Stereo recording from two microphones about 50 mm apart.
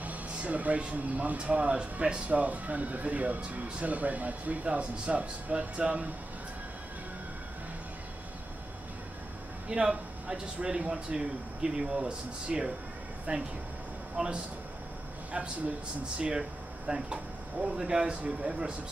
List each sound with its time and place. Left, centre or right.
0.0 s speech: right
9.7 s speech: centre
14.1 s speech: centre